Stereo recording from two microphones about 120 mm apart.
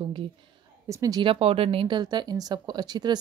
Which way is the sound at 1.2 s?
50° right (ahead or behind).